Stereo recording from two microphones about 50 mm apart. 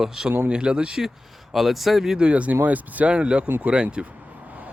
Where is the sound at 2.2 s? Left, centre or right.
Right.